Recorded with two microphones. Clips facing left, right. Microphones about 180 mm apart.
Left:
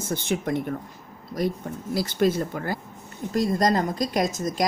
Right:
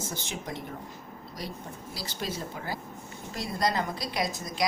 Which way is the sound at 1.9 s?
55° left (ahead or behind).